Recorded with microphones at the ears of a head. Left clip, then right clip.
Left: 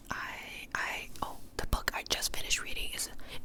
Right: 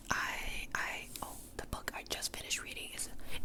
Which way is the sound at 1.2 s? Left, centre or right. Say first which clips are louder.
Left 6 dB; left.